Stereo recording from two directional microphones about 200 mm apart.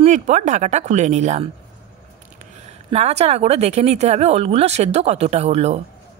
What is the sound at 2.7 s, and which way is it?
A woman's voice, 30° right (ahead or behind).